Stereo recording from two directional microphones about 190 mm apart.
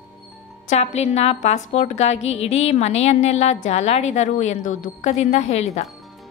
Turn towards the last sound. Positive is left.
turn(degrees=35)  # may be behind; listen again after turning